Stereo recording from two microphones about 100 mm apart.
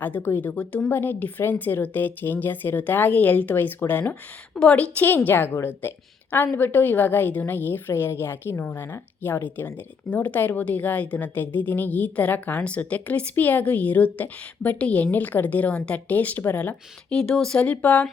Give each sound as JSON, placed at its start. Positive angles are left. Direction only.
{"t": 0.0, "sound": "a woman's voice", "side_deg": 20}